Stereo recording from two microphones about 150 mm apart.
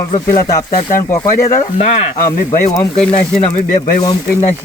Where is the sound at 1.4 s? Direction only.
50° left (ahead or behind).